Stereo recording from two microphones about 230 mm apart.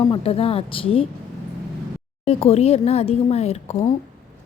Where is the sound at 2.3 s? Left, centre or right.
Left.